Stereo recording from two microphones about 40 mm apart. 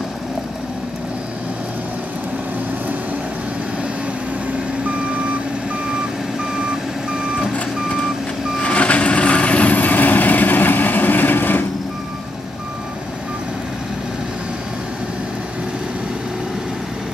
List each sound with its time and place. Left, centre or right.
6.5 s reversing beeps: centre
8.5 s vehicle: left